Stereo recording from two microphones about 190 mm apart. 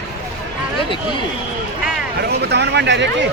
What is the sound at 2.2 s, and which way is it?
Speech, 60° right (ahead or behind).